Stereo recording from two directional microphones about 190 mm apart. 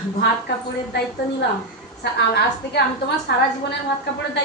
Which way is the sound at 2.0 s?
65° left (ahead or behind).